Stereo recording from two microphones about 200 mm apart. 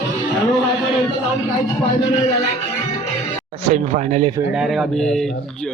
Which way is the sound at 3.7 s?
35° right (ahead or behind).